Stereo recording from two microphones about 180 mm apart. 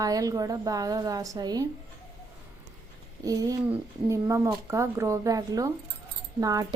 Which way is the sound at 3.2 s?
20° right (ahead or behind).